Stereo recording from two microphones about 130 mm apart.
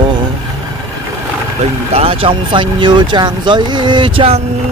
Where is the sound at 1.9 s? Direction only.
50° right (ahead or behind).